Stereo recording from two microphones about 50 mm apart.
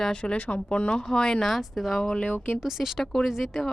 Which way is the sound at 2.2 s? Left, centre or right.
Left.